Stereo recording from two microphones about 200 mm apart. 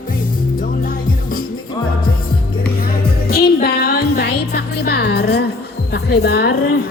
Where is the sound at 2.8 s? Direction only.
50° left (ahead or behind).